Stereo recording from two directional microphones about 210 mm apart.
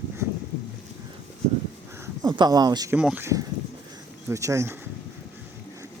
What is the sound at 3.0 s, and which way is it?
Speech, 5° right (ahead or behind).